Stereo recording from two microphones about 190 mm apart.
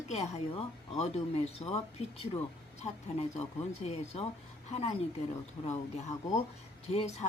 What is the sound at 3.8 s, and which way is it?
Speech, 35° left (ahead or behind).